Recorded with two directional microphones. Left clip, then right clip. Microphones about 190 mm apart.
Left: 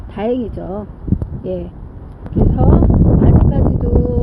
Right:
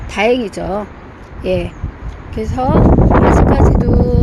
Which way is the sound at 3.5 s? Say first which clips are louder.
Right 4 dB; 25° right (ahead or behind).